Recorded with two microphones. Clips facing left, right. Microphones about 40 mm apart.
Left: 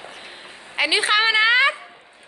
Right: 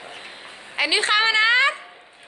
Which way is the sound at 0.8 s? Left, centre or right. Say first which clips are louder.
Left 1 dB; centre.